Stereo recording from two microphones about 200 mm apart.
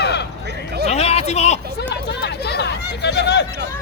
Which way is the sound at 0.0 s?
55° left (ahead or behind).